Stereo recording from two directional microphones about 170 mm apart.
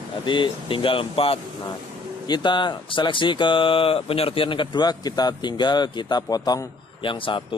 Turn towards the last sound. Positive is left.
turn(degrees=30)  # may be behind; listen again after turning